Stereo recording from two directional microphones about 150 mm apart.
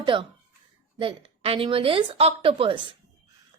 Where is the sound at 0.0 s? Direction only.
30° right (ahead or behind).